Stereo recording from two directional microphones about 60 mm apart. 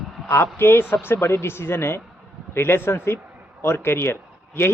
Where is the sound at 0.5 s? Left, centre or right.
Left.